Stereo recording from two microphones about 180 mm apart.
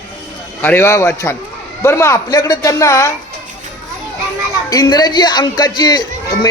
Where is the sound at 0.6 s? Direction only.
10° left (ahead or behind).